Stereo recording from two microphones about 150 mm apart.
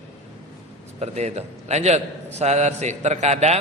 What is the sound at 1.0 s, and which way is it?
A man's voice, 50° right (ahead or behind).